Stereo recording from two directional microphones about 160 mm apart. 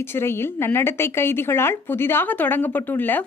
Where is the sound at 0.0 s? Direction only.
15° left (ahead or behind).